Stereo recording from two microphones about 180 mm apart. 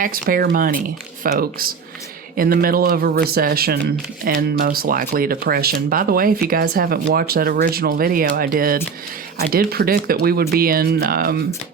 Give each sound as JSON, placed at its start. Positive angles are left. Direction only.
{"t": 0.0, "sound": "speech", "side_deg": -55}